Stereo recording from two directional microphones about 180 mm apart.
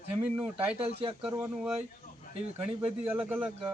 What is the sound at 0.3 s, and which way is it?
Speech, 5° right (ahead or behind).